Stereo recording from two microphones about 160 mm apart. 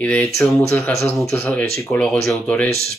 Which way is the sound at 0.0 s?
10° left (ahead or behind).